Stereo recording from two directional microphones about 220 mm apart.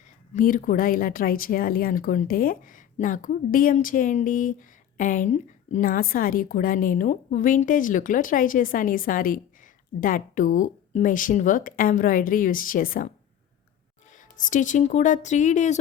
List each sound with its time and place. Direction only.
0.3 s a woman's voice: 40° left (ahead or behind)
14.1 s a woman's voice: 35° left (ahead or behind)